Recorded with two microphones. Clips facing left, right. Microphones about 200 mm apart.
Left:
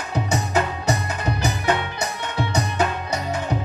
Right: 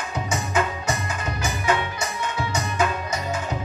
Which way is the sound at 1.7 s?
65° left (ahead or behind).